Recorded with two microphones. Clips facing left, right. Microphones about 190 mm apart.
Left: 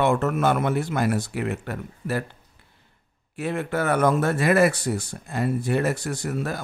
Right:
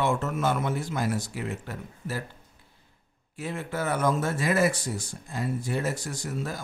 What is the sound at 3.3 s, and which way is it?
Speech, 65° left (ahead or behind).